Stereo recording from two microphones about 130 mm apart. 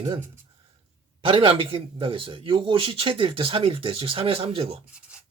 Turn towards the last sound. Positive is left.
turn(degrees=-45)  # may be behind; listen again after turning